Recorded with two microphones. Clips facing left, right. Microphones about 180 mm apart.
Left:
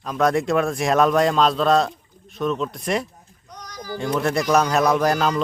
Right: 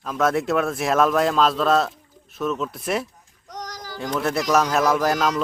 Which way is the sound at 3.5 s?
90° right.